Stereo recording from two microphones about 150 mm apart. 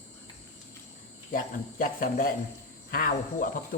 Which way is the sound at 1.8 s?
65° left (ahead or behind).